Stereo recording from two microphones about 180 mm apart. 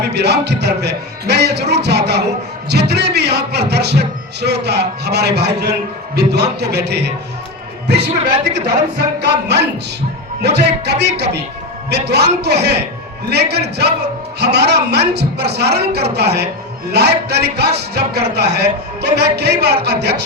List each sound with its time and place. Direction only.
0.0 s a man's voice: 65° right (ahead or behind)
8.6 s a man's voice: 65° right (ahead or behind)